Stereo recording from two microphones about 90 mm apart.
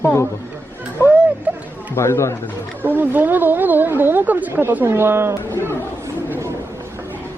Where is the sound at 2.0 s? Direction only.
30° left (ahead or behind).